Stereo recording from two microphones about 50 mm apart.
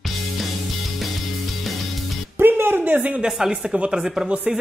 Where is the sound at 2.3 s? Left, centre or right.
Right.